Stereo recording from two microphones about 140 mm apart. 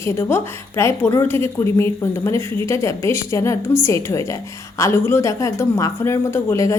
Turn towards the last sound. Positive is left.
turn(degrees=20)  # may be behind; listen again after turning